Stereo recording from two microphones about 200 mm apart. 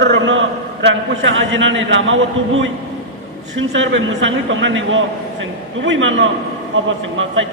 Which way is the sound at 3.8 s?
70° right (ahead or behind).